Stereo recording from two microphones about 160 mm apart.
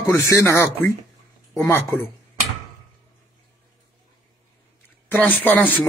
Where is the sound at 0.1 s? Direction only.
15° left (ahead or behind).